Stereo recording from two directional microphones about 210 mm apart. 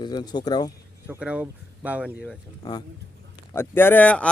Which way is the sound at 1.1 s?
5° right (ahead or behind).